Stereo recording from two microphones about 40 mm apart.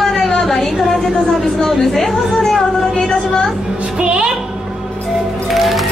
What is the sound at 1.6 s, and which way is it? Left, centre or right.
Speech, centre.